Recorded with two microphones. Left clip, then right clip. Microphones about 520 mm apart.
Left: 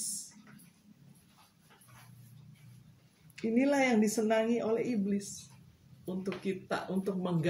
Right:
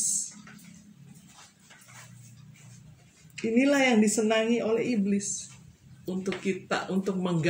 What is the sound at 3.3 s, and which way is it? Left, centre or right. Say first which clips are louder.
A woman's voice: right 5 dB; left.